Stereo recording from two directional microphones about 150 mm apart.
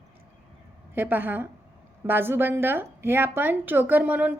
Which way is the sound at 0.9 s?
15° right (ahead or behind).